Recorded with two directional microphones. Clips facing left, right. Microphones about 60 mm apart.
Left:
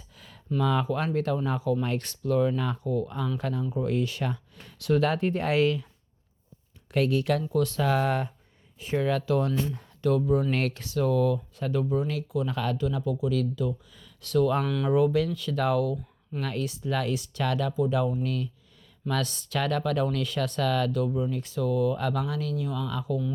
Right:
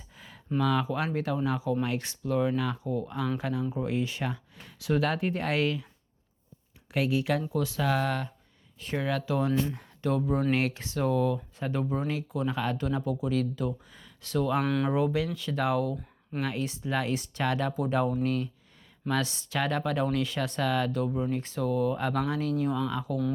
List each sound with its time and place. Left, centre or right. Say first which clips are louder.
0.6 s speech: left 1 dB; centre
6.9 s speech: left 2 dB; centre
7.8 s speech: even; centre
9.0 s speech: left 3 dB; centre
9.6 s speech: left 4 dB; right
10.5 s speech: right 1 dB; centre
10.8 s speech: left 5 dB; right
12.7 s speech: left 1 dB; right; by 14.6 s centre
14.6 s speech: right 1 dB; right
14.8 s speech: left 4 dB; right
17.7 s speech: left 1 dB; right
19.1 s speech: even; right